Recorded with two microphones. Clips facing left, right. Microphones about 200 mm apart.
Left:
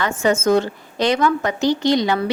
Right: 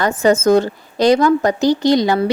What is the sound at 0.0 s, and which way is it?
A woman's voice, 35° right (ahead or behind).